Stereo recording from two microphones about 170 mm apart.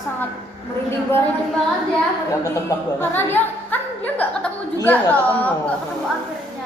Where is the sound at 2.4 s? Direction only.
15° left (ahead or behind).